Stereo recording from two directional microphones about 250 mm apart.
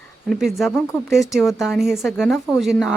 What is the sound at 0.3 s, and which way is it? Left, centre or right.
A woman's voice, centre.